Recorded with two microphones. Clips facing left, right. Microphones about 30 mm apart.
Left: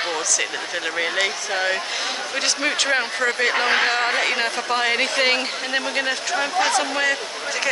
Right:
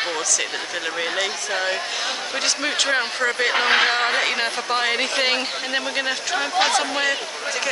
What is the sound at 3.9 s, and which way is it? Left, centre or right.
Speech, centre.